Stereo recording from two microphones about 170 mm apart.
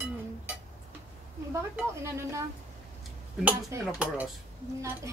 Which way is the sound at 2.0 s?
15° right (ahead or behind).